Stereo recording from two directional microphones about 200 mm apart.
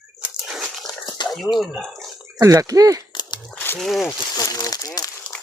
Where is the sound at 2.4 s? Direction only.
15° right (ahead or behind).